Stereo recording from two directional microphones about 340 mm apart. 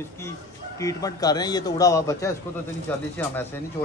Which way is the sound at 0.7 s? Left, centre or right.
Centre.